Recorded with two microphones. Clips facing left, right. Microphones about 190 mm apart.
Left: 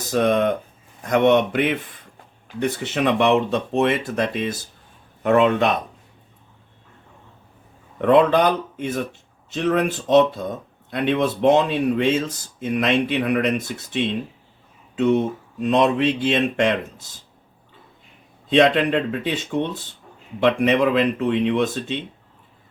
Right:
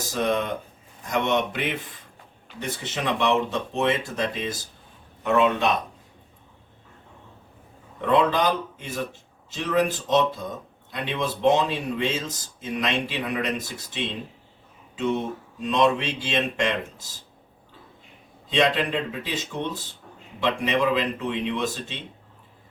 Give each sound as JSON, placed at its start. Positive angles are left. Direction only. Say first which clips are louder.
{"t": 0.1, "sound": "speech", "louder": "left 7 dB", "side_deg": 55}
{"t": 8.0, "sound": "speech", "louder": "left 6 dB", "side_deg": 60}
{"t": 14.9, "sound": "speech", "louder": "left 7 dB", "side_deg": 60}
{"t": 18.5, "sound": "speech", "louder": "left 6 dB", "side_deg": 60}